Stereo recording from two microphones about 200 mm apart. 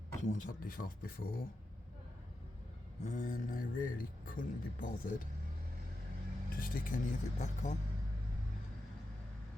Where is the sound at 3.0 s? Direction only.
40° left (ahead or behind).